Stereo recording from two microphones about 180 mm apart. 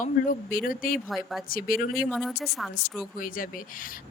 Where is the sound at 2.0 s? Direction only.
Centre (ahead or behind).